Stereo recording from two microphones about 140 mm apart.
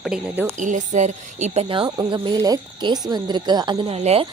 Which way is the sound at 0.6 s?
60° right (ahead or behind).